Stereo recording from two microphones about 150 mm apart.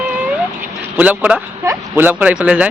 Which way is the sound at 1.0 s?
10° right (ahead or behind).